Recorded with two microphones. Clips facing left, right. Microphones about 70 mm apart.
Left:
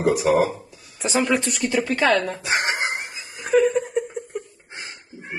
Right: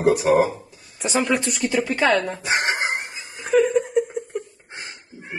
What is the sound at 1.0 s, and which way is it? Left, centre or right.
A woman's voice, centre.